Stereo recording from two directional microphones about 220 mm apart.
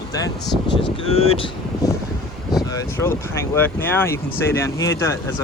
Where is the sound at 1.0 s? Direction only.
25° left (ahead or behind).